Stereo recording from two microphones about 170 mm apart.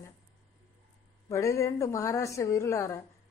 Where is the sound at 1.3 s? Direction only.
15° left (ahead or behind).